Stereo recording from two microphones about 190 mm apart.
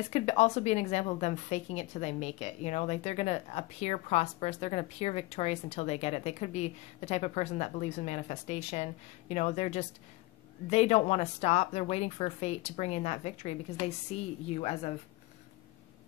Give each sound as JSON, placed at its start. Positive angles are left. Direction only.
{"t": 0.1, "sound": "a woman's voice", "side_deg": 35}